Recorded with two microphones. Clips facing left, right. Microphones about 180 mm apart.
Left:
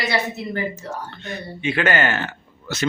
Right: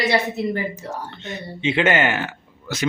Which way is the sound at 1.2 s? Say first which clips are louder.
Right 2 dB; 20° right (ahead or behind).